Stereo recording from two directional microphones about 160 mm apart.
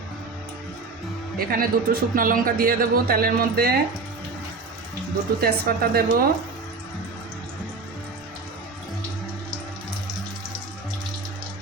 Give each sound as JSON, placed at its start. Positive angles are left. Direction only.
{"t": 1.5, "sound": "speech", "side_deg": -65}
{"t": 5.4, "sound": "speech", "side_deg": -80}